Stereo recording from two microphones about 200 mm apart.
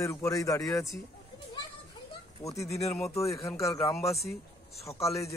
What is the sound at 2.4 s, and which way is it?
Speech, 15° left (ahead or behind).